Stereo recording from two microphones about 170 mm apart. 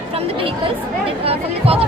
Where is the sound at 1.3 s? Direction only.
35° right (ahead or behind).